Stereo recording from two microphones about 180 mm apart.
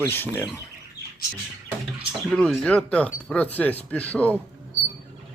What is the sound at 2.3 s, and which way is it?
Speech, centre (ahead or behind).